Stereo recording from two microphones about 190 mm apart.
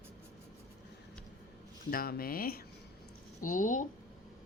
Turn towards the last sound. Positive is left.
turn(degrees=40)  # may be behind; listen again after turning